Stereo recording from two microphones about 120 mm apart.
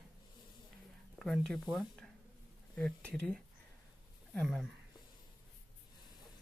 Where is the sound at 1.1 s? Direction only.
Centre (ahead or behind).